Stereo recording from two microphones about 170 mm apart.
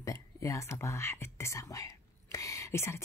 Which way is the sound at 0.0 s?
20° left (ahead or behind).